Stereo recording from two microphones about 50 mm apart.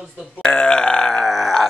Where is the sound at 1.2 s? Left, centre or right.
Centre.